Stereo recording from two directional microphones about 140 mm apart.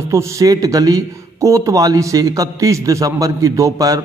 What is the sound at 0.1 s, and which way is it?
A man's voice, 20° right (ahead or behind).